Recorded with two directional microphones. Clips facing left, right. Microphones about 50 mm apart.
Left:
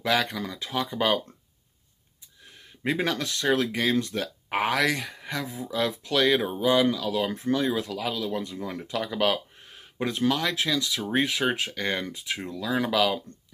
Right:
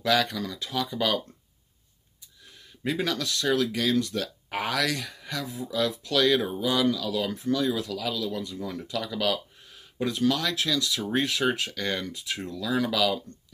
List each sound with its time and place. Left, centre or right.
0.0 s speech: centre
2.5 s speech: left